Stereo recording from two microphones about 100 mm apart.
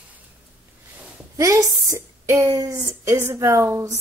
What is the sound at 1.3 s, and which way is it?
A woman's voice, 30° right (ahead or behind).